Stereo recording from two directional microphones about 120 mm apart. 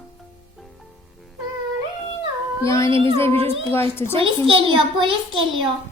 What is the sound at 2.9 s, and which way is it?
Speech, 50° right (ahead or behind).